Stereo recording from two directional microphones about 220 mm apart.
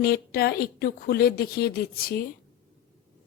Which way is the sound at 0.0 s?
45° left (ahead or behind).